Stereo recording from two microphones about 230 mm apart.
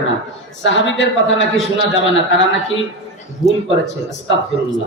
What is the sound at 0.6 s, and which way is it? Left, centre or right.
Speech, left.